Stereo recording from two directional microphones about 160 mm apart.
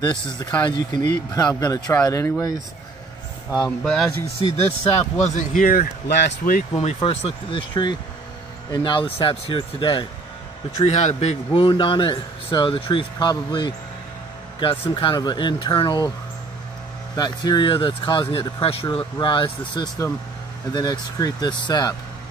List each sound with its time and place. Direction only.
0.0 s speech: 25° left (ahead or behind)
3.4 s speech: 5° left (ahead or behind)
4.4 s a man's voice: 35° left (ahead or behind)
5.2 s speech: 50° left (ahead or behind); by 6.6 s 75° left (ahead or behind)
6.7 s a man's voice: 35° left (ahead or behind)
10.8 s a man's voice: 45° left (ahead or behind); by 16.1 s 30° left (ahead or behind)
17.1 s speech: 25° left (ahead or behind)